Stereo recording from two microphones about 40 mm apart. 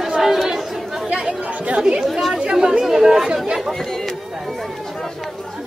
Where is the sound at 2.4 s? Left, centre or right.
Centre.